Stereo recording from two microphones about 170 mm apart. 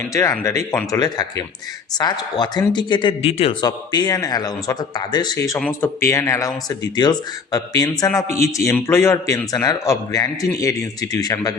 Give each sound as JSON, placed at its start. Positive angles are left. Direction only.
{"t": 0.0, "sound": "speech", "side_deg": 20}
{"t": 0.9, "sound": "a man's voice", "side_deg": 25}
{"t": 5.5, "sound": "a man's voice", "side_deg": 10}